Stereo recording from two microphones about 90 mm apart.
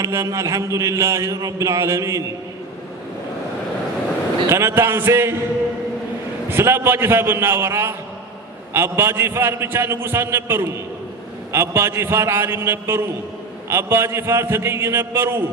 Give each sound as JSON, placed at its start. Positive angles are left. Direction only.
{"t": 0.0, "sound": "speech", "side_deg": -35}
{"t": 4.4, "sound": "a man's voice", "side_deg": -30}
{"t": 6.5, "sound": "a man's voice", "side_deg": -25}